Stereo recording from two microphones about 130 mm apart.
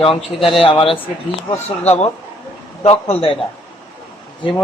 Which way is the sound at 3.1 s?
45° left (ahead or behind).